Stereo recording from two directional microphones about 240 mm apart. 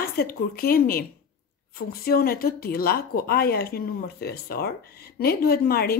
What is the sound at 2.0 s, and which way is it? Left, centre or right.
Speech, left.